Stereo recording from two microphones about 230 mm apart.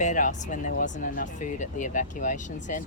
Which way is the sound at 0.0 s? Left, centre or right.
Left.